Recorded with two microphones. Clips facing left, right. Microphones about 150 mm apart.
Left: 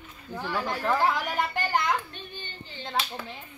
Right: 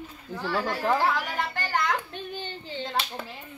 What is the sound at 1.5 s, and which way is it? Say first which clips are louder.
Children playing: even; 15° left (ahead or behind).